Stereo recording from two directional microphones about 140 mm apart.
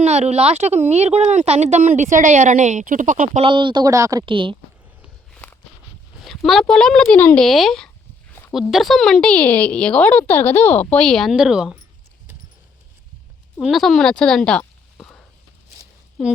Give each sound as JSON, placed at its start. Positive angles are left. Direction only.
{"t": 0.0, "sound": "speech", "side_deg": -50}
{"t": 3.4, "sound": "speech", "side_deg": -35}
{"t": 4.3, "sound": "speech", "side_deg": -35}
{"t": 5.3, "sound": "walk", "side_deg": 10}
{"t": 6.2, "sound": "speech", "side_deg": 0}
{"t": 13.6, "sound": "speech", "side_deg": 0}